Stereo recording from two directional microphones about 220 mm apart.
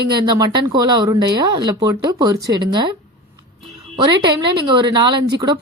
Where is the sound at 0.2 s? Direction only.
20° right (ahead or behind).